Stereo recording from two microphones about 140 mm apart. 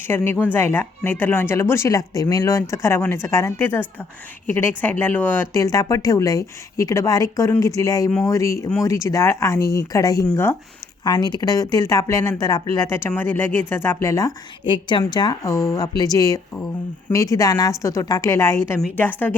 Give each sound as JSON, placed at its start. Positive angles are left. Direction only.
{"t": 0.1, "sound": "speech", "side_deg": 15}